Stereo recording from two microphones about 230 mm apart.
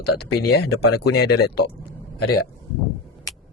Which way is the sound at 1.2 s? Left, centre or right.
Left.